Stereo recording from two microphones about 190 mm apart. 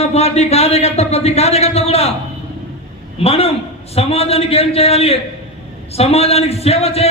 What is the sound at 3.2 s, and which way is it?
A man's voice, 30° left (ahead or behind).